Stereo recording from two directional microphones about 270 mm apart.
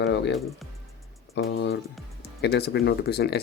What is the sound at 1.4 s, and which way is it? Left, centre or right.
Speech, left.